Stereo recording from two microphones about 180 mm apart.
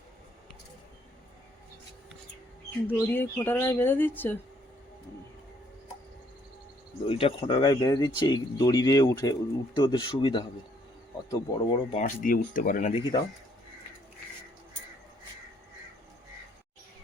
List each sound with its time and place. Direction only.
2.8 s speech: 10° left (ahead or behind)
7.1 s speech: 30° left (ahead or behind)
11.9 s speech: 40° left (ahead or behind)
12.9 s speech: 25° left (ahead or behind)